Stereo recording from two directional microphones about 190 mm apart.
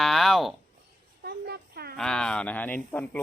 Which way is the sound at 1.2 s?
55° right (ahead or behind).